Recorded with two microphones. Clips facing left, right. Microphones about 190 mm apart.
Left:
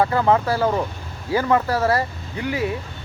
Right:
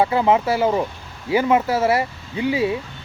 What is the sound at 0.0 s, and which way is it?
Speech, 15° right (ahead or behind).